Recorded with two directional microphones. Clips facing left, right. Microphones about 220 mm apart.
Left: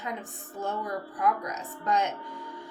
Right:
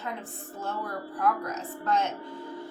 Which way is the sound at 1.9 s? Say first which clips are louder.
Even; 15° left (ahead or behind).